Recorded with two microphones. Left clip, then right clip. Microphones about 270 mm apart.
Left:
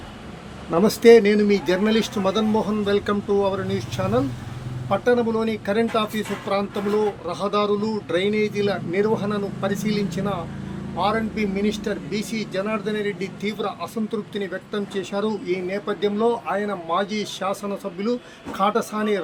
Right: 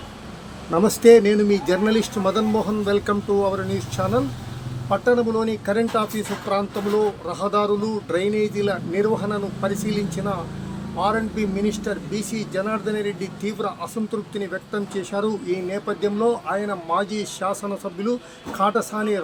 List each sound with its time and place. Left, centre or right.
0.7 s speech: centre